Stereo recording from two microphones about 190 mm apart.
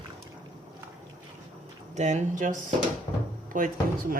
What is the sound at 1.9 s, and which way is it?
A woman's voice, 40° right (ahead or behind).